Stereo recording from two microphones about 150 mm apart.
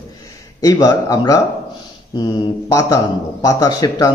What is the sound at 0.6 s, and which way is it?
Speech, 25° left (ahead or behind).